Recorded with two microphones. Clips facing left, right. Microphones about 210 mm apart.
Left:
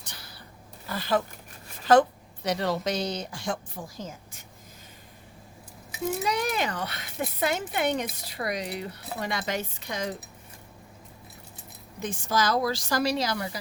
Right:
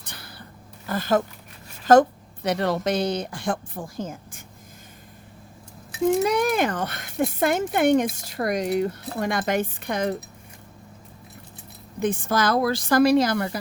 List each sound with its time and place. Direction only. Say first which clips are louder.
0.0 s a sound: right 4 dB; 55° right (ahead or behind)
0.9 s a woman's voice: right 5 dB; 50° right (ahead or behind)
6.2 s speech: right 7 dB; 50° right (ahead or behind)
11.9 s a woman's voice: right 5 dB; 55° right (ahead or behind)